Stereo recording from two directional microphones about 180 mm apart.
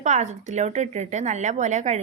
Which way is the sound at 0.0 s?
40° right (ahead or behind).